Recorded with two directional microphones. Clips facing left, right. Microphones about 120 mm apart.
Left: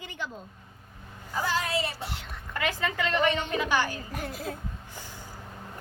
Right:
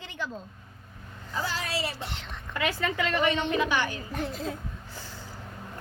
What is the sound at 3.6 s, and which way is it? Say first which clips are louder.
Speech: left 1 dB; 40° left (ahead or behind).